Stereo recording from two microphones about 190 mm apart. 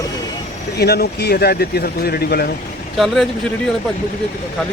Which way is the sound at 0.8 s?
60° left (ahead or behind).